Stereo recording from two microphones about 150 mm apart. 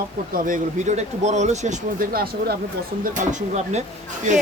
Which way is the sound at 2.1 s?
90° right.